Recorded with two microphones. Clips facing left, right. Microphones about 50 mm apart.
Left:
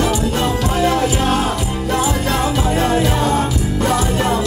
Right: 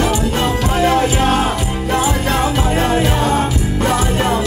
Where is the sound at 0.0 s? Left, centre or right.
Right.